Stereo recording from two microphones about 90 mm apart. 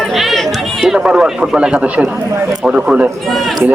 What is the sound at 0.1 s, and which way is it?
Chatter, centre (ahead or behind).